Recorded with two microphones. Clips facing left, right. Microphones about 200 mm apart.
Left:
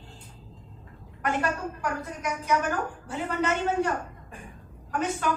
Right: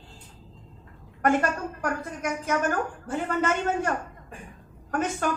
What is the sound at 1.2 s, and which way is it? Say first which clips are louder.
A woman's voice: right 4 dB; 45° right (ahead or behind).